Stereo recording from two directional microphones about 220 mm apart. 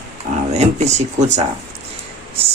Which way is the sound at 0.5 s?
30° right (ahead or behind).